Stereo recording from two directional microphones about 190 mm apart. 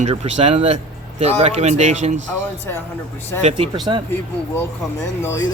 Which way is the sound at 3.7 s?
20° right (ahead or behind).